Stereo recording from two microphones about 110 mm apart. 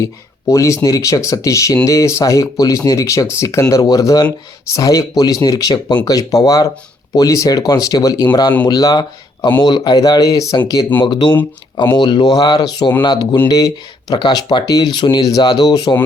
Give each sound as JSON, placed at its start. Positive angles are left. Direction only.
{"t": 0.0, "sound": "speech", "side_deg": 30}
{"t": 11.0, "sound": "speech", "side_deg": 45}